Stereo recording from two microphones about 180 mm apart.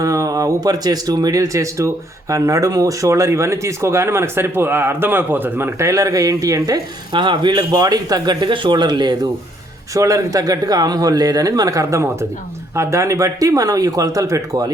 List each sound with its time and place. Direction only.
0.0 s a man's voice: 20° right (ahead or behind)